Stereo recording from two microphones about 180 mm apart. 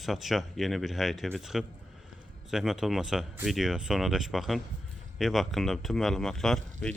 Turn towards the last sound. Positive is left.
turn(degrees=5)  # may be behind; listen again after turning